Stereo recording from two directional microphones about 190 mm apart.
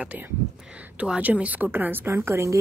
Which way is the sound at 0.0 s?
10° right (ahead or behind).